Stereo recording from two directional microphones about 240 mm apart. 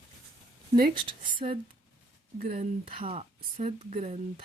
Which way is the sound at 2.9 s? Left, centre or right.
Right.